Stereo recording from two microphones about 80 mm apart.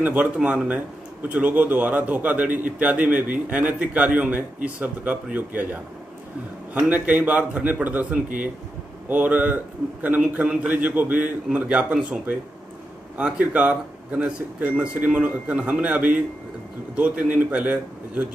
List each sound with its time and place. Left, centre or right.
0.0 s a man's voice: centre